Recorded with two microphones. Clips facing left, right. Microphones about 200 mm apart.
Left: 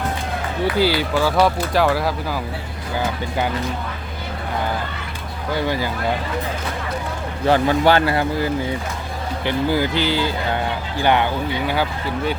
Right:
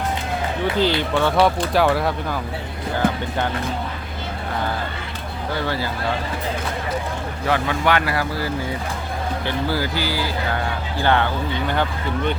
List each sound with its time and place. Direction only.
0.6 s speech: 5° left (ahead or behind)
5.6 s speech: 15° left (ahead or behind)
7.4 s speech: 30° left (ahead or behind)
9.5 s speech: 20° left (ahead or behind)